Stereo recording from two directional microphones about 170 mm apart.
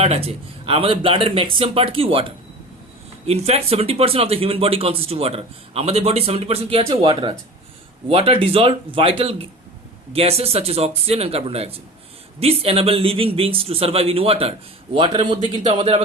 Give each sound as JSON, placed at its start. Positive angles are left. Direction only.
{"t": 0.0, "sound": "speech", "side_deg": -35}
{"t": 3.2, "sound": "a man's voice", "side_deg": -40}